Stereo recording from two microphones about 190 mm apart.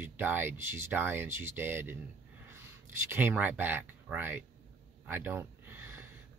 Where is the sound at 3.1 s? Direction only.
10° right (ahead or behind).